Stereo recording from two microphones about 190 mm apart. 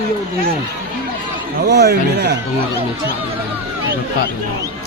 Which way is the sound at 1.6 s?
60° right (ahead or behind).